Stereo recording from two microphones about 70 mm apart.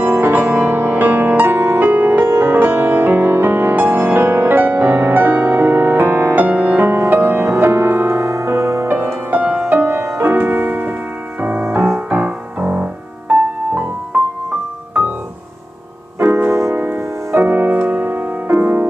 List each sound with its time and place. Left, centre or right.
0.0 s music: right
6.4 s music: right
9.7 s music: right
12.1 s music: right
16.2 s music: right